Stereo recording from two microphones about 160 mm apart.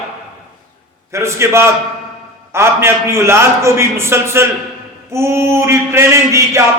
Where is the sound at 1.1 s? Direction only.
15° right (ahead or behind).